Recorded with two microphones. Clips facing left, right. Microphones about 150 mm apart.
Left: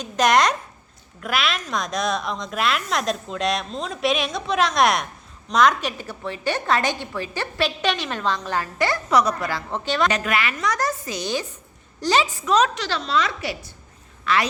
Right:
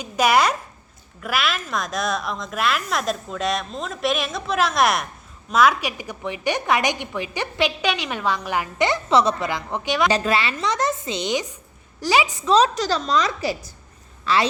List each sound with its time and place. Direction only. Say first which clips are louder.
0.0 s a woman's voice: even; 5° right (ahead or behind)
10.1 s a woman's voice: right 3 dB; 30° right (ahead or behind)
11.9 s a woman's voice: even; 5° right (ahead or behind)
12.5 s a woman's voice: right 4 dB; 30° right (ahead or behind)